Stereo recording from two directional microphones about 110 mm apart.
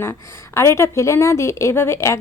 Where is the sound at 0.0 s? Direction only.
25° left (ahead or behind).